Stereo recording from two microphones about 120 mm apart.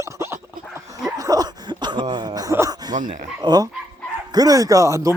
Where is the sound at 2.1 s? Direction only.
35° right (ahead or behind).